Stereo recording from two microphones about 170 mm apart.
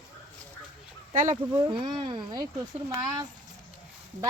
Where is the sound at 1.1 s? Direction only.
50° right (ahead or behind).